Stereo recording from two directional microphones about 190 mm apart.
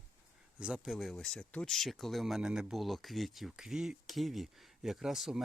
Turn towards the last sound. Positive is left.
turn(degrees=0)  # may be behind; listen again after turning